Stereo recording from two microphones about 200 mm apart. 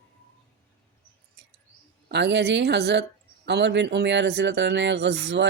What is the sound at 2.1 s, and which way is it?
Speech, 60° right (ahead or behind).